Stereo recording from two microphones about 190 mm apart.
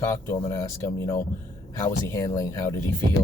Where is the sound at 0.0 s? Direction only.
15° left (ahead or behind).